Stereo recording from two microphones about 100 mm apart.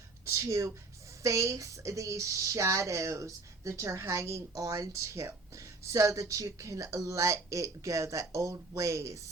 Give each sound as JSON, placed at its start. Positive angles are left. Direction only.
{"t": 0.3, "sound": "speech", "side_deg": -30}